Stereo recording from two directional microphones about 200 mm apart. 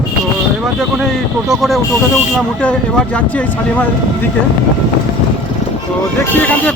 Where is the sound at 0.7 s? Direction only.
Centre (ahead or behind).